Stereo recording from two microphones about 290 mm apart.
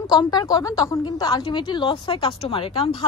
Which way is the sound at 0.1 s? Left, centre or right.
Centre.